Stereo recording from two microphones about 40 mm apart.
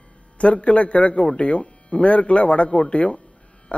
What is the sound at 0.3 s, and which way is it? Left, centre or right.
A man's voice, left.